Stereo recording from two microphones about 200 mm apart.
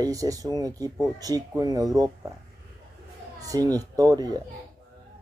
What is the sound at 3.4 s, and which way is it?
Speech, 15° right (ahead or behind).